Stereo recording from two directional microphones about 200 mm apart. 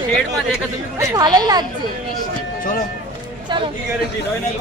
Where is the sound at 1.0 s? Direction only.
20° right (ahead or behind).